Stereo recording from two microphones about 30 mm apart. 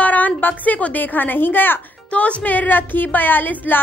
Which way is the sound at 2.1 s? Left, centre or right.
Left.